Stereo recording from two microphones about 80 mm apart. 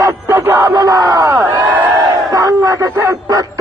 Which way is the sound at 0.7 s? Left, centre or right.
Right.